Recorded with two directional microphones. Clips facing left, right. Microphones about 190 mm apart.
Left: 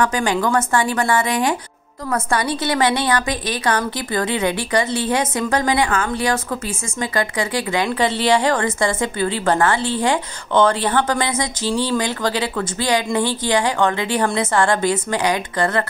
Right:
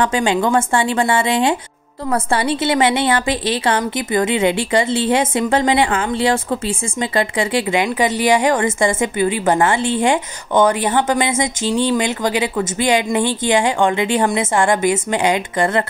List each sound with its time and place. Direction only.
0.0 s a woman's voice: 25° right (ahead or behind)